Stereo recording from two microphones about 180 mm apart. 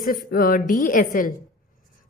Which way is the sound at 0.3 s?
50° left (ahead or behind).